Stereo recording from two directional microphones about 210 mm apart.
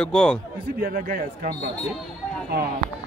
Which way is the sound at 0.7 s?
45° right (ahead or behind).